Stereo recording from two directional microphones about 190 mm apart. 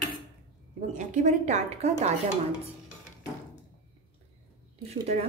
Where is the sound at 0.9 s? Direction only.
40° right (ahead or behind).